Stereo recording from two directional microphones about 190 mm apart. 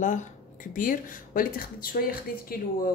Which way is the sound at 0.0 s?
40° left (ahead or behind).